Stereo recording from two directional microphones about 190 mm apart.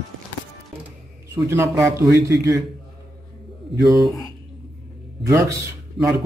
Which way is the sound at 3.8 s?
20° right (ahead or behind).